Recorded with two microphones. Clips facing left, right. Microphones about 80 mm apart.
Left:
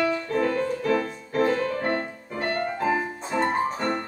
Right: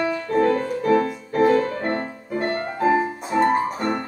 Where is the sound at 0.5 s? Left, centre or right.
Right.